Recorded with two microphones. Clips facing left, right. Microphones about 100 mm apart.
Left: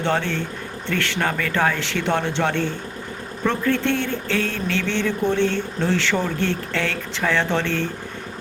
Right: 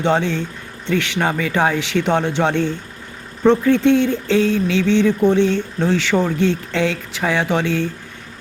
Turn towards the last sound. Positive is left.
turn(degrees=-15)  # may be behind; listen again after turning